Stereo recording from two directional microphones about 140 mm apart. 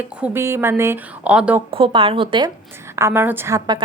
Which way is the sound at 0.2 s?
15° right (ahead or behind).